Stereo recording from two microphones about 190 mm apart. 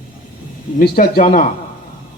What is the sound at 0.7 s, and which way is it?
Speech, 50° left (ahead or behind).